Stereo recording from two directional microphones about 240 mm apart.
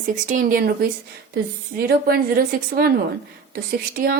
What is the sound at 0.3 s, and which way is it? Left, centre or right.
A woman's voice, right.